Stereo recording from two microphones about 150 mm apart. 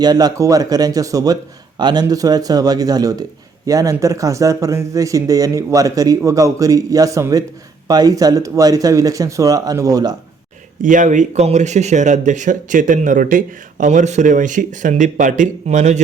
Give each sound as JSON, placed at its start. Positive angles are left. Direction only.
{"t": 0.0, "sound": "speech", "side_deg": -25}
{"t": 10.8, "sound": "speech", "side_deg": -55}